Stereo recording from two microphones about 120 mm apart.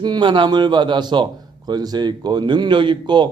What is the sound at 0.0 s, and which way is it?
A man's voice, 40° right (ahead or behind).